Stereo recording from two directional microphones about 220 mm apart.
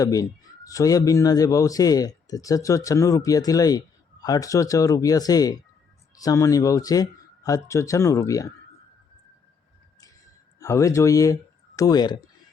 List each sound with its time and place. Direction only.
0.0 s speech: 15° left (ahead or behind)
10.6 s speech: 15° left (ahead or behind)